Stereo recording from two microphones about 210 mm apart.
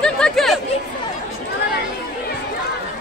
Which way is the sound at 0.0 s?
5° left (ahead or behind).